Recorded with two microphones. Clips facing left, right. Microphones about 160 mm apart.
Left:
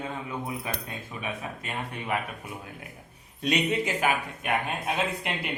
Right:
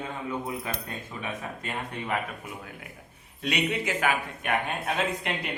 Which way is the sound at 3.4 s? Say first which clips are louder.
Left 2 dB; 15° left (ahead or behind).